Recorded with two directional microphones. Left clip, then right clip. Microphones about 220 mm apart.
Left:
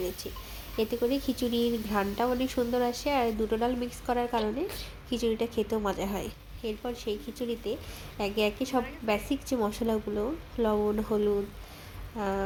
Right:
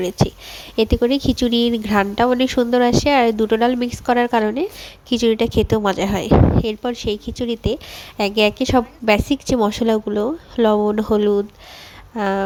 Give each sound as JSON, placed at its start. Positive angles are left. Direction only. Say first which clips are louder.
{"t": 0.8, "sound": "a woman's voice", "louder": "right 11 dB", "side_deg": -40}